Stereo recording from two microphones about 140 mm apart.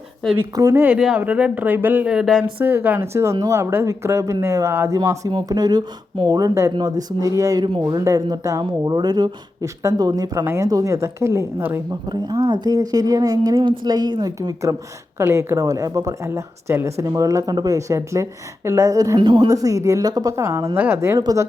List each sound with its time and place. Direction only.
0.3 s speech: 20° right (ahead or behind)
5.3 s speech: 30° right (ahead or behind)